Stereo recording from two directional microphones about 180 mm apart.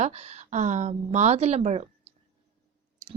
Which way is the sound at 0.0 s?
35° right (ahead or behind).